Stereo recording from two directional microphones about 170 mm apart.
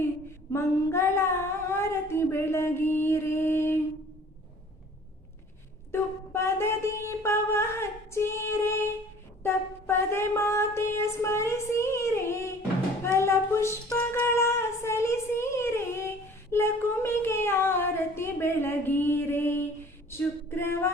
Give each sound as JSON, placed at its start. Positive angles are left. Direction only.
{"t": 0.5, "sound": "speech", "side_deg": 15}
{"t": 5.9, "sound": "speech", "side_deg": 15}
{"t": 13.1, "sound": "female singing", "side_deg": 15}
{"t": 20.1, "sound": "a sound", "side_deg": 15}